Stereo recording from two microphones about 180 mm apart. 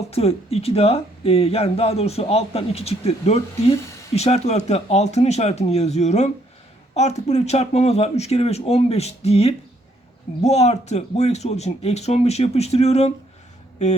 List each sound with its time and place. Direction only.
0.1 s speech: 35° left (ahead or behind)
3.8 s speech: 15° left (ahead or behind)
4.1 s speech: 35° left (ahead or behind)